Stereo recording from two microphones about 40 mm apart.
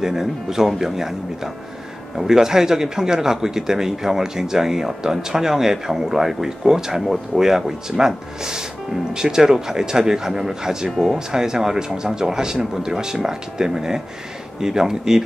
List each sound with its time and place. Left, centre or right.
0.0 s a man's voice: centre